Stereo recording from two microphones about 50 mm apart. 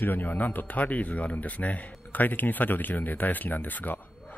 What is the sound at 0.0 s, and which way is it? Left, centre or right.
A man's voice, left.